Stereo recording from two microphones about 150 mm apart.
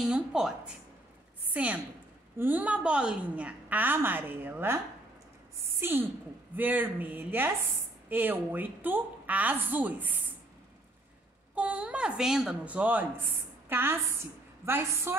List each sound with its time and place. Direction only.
0.0 s a woman's voice: 5° right (ahead or behind)
5.8 s a woman's voice: 15° right (ahead or behind)
11.5 s a woman's voice: 10° right (ahead or behind)
15.1 s a woman's voice: 15° right (ahead or behind)